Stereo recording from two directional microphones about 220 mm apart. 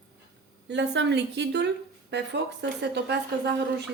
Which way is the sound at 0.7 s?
55° right (ahead or behind).